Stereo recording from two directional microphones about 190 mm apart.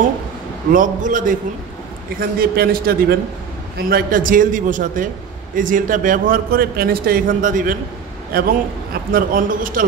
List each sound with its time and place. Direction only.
0.7 s a man's voice: 45° right (ahead or behind)